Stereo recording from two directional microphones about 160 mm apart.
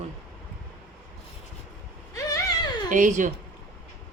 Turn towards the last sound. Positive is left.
turn(degrees=-50)  # may be behind; listen again after turning